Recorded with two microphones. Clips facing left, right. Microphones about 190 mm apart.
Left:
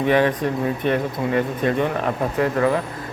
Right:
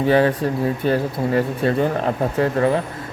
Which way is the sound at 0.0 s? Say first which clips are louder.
Right 2 dB; 30° right (ahead or behind).